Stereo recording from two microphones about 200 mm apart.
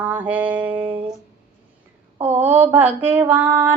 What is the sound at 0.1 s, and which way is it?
Speech, 5° right (ahead or behind).